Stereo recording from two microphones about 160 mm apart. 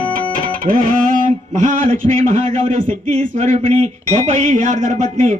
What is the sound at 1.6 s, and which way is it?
A man's voice, 50° right (ahead or behind).